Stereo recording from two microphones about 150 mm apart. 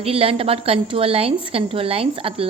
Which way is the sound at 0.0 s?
40° right (ahead or behind).